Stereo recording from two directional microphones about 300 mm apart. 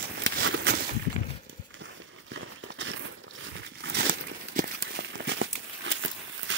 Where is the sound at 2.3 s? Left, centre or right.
Right.